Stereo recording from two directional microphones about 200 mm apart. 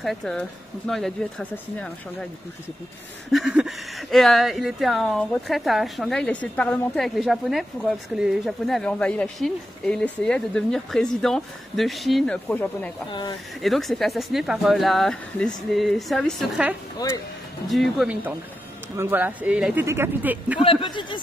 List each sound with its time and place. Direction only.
0.0 s speech: centre (ahead or behind)
3.3 s speech: centre (ahead or behind)
20.6 s speech: 25° left (ahead or behind)